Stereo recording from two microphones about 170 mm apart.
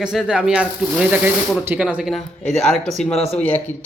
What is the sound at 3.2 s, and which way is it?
Speech, 35° left (ahead or behind).